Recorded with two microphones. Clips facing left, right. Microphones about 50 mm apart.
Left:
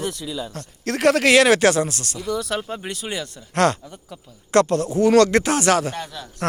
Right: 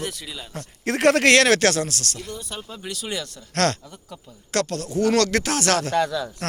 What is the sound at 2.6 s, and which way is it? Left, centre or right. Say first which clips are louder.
Speech: left 4 dB; left.